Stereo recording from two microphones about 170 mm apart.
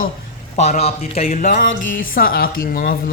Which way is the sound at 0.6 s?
40° left (ahead or behind).